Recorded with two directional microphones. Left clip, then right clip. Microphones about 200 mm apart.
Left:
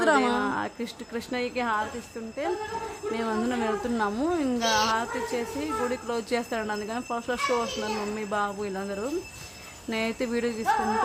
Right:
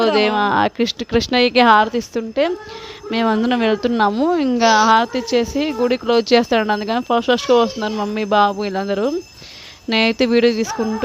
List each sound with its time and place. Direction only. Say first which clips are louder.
0.3 s a woman's voice: right 13 dB; 45° right (ahead or behind)